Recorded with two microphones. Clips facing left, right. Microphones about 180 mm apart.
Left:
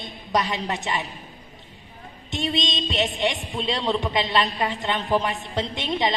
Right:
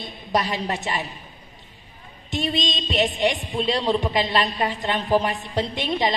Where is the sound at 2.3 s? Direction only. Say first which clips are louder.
Right 1 dB; 20° left (ahead or behind).